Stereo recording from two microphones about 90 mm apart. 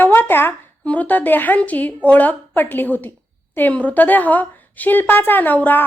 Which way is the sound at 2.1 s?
20° left (ahead or behind).